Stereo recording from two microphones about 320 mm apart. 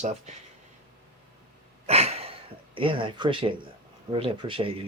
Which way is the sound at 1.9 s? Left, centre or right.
Centre.